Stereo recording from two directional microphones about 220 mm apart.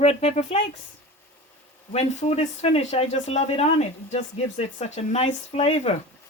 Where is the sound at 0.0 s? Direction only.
25° left (ahead or behind).